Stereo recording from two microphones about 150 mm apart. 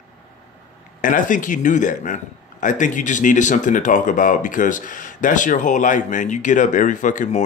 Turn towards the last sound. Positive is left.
turn(degrees=60)  # may be behind; listen again after turning